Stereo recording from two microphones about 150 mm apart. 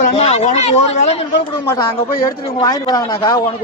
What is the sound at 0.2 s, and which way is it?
Speech, 45° left (ahead or behind).